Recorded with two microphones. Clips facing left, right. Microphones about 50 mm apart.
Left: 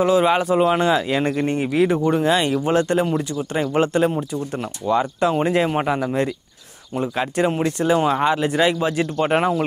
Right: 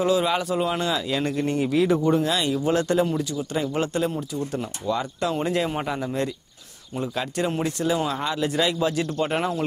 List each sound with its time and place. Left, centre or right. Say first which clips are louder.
0.0 s speech: left 5 dB; left